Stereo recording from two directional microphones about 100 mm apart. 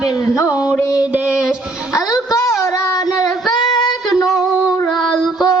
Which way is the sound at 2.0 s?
30° left (ahead or behind).